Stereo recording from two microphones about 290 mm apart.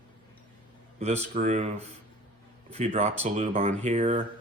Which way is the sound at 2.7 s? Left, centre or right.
Right.